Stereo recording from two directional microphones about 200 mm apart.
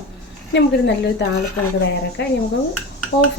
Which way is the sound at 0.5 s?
60° left (ahead or behind).